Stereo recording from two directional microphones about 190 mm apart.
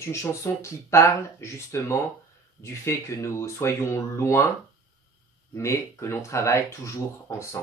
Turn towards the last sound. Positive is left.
turn(degrees=15)  # may be behind; listen again after turning